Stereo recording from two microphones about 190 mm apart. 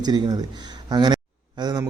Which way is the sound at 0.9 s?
20° right (ahead or behind).